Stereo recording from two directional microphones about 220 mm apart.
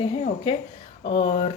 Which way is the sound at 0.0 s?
20° left (ahead or behind).